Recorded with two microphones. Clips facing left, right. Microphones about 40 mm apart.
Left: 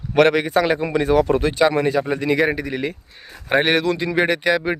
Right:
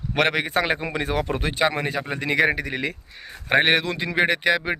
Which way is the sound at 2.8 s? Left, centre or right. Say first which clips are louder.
Left 2 dB; right.